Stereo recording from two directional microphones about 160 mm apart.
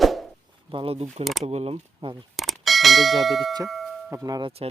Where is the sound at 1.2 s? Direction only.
Centre (ahead or behind).